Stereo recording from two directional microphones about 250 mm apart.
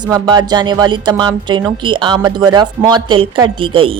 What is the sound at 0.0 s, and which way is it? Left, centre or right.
A woman's voice, centre.